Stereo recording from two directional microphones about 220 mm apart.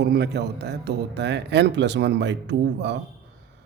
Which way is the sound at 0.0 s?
50° right (ahead or behind).